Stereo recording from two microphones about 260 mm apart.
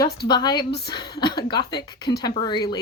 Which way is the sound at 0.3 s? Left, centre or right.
Centre.